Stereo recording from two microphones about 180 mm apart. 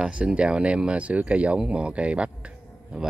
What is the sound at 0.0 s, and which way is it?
Speech, 5° right (ahead or behind).